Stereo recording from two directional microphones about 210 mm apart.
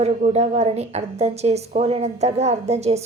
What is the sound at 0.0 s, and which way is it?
A woman's voice, 30° right (ahead or behind).